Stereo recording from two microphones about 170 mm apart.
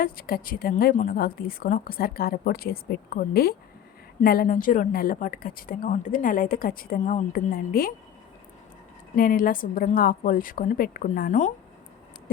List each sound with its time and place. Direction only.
0.0 s speech: 60° left (ahead or behind)
9.1 s speech: 55° left (ahead or behind)